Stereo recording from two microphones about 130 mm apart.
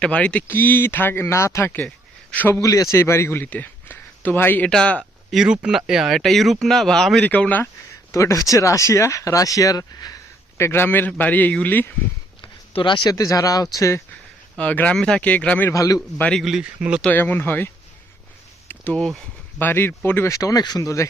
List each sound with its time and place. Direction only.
0.0 s a man's voice: 10° left (ahead or behind)
5.3 s speech: 5° right (ahead or behind); by 7.7 s 10° left (ahead or behind)
8.1 s speech: 25° left (ahead or behind)
10.6 s a man's voice: 20° left (ahead or behind)
12.4 s speech: 40° left (ahead or behind)
14.5 s a man's voice: 10° left (ahead or behind)
15.7 s speech: 25° left (ahead or behind)
16.1 s a man's voice: 10° left (ahead or behind)
16.4 s speech: 5° right (ahead or behind)
17.0 s a man's voice: 15° left (ahead or behind)
18.7 s speech: 10° left (ahead or behind)